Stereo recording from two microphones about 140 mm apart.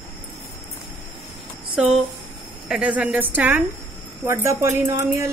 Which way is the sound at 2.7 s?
10° right (ahead or behind).